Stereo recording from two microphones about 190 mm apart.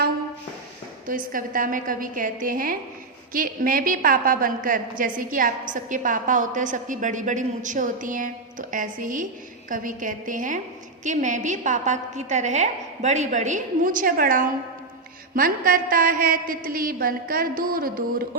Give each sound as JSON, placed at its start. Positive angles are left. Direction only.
{"t": 1.0, "sound": "a woman's voice", "side_deg": -45}